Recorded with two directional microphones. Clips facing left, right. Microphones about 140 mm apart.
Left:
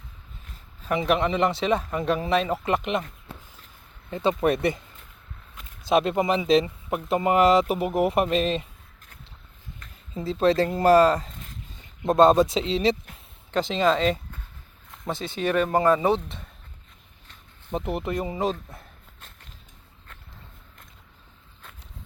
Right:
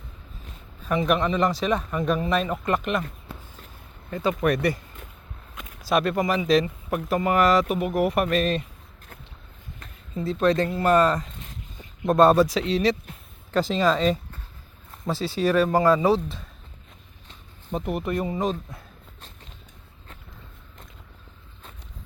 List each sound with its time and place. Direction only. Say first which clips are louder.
1.0 s speech: even; 30° left (ahead or behind)
4.1 s speech: left 1 dB; 25° left (ahead or behind)
5.9 s speech: left 1 dB; 25° left (ahead or behind)
10.2 s speech: even; 30° left (ahead or behind)
15.2 s speech: right 3 dB; 35° right (ahead or behind)
15.8 s speech: even; 25° left (ahead or behind)
17.7 s speech: right 1 dB; 25° left (ahead or behind)